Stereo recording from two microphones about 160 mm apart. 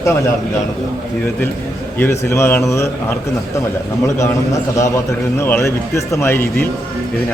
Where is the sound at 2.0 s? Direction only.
15° left (ahead or behind).